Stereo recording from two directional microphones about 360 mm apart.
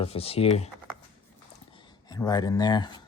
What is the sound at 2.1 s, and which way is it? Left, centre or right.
Speech, centre.